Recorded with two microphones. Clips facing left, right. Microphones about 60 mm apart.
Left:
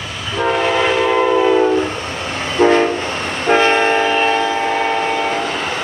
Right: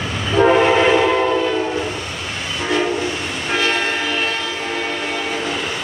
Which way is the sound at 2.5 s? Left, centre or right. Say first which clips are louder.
Left 7 dB; left.